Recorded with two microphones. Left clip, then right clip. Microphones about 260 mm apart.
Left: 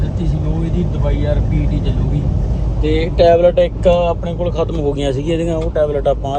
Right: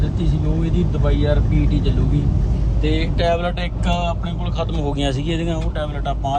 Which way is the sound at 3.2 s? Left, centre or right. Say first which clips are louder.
Left 12 dB; centre.